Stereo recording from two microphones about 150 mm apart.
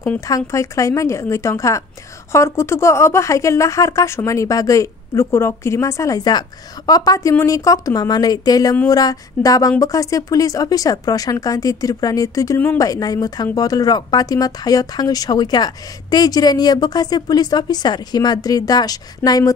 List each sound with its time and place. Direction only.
0.3 s speech: 20° left (ahead or behind)